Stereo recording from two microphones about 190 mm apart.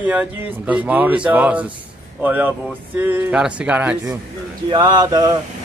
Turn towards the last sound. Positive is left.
turn(degrees=-20)  # may be behind; listen again after turning